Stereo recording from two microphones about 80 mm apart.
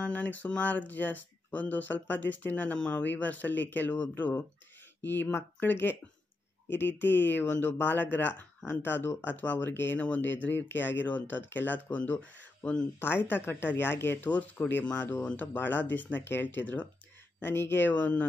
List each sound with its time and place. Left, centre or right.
0.0 s speech: centre
13.1 s speech: left